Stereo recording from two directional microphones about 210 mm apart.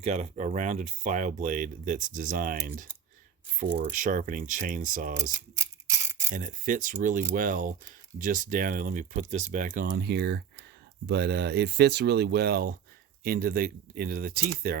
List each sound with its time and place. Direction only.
0.0 s speech: 30° right (ahead or behind)
5.3 s a sound: 15° right (ahead or behind)
6.3 s speech: 40° right (ahead or behind)
9.8 s speech: 50° right (ahead or behind)